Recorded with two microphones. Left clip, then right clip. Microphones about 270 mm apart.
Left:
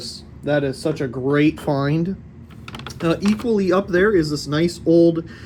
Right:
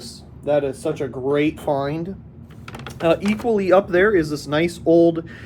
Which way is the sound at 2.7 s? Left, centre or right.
Centre.